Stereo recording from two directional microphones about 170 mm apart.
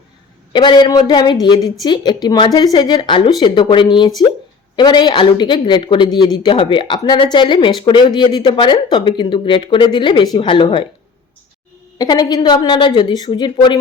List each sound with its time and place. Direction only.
0.5 s speech: 25° left (ahead or behind)
11.9 s speech: 25° left (ahead or behind)